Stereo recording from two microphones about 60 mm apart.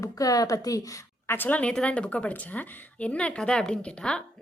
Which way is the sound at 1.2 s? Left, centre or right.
Left.